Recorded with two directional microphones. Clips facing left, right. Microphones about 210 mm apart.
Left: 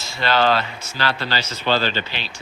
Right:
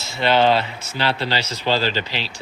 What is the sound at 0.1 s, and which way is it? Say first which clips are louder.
Speech: right 2 dB; 20° right (ahead or behind).